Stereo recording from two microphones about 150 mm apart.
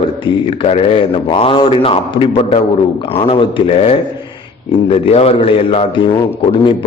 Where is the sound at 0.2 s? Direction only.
35° left (ahead or behind).